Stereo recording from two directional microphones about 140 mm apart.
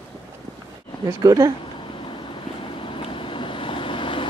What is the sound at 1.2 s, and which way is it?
Speech, 25° right (ahead or behind).